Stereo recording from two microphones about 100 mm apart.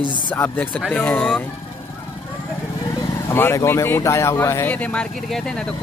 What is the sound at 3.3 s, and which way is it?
Speech, 25° left (ahead or behind).